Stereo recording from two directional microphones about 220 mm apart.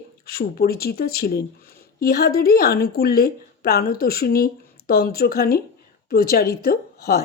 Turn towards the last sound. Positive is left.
turn(degrees=45)  # may be behind; listen again after turning